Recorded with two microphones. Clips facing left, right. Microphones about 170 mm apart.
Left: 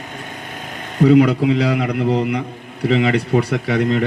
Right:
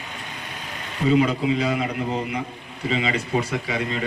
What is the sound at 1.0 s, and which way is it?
A man's voice, 70° left (ahead or behind).